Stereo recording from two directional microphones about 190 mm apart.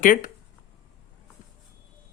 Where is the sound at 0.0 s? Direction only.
45° left (ahead or behind).